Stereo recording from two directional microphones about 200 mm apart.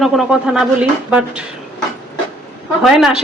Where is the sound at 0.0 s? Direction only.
Centre (ahead or behind).